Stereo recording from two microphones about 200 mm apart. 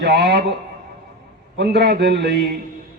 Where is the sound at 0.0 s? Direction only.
55° right (ahead or behind).